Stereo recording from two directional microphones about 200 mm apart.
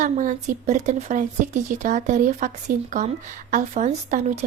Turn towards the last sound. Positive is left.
turn(degrees=-35)  # may be behind; listen again after turning